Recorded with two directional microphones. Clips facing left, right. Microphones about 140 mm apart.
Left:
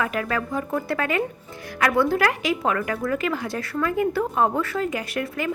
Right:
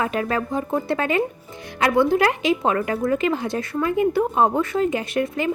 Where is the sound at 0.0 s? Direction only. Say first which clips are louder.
Right 2 dB; 25° right (ahead or behind).